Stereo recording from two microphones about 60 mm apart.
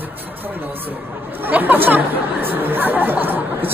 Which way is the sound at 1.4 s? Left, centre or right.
Right.